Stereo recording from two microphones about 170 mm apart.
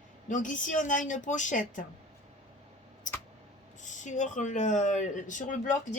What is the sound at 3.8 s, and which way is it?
Speech, 45° left (ahead or behind).